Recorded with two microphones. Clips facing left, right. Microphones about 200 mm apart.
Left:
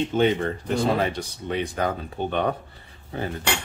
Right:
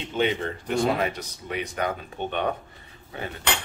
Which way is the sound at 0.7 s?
30° left (ahead or behind).